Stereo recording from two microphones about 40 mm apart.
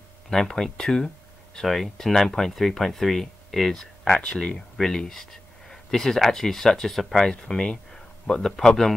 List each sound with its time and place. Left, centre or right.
0.3 s speech: centre
0.7 s a sound: centre
1.7 s speech: centre
4.3 s speech: left
4.7 s speech: centre
7.2 s speech: centre